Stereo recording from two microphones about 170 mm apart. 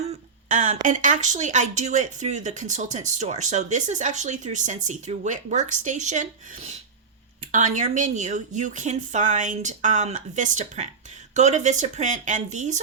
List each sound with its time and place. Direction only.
0.4 s speech: 50° right (ahead or behind)